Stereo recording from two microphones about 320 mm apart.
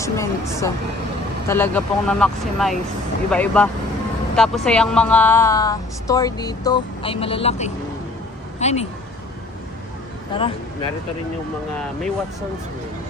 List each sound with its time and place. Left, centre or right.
0.0 s a woman's voice: centre
10.3 s a woman's voice: centre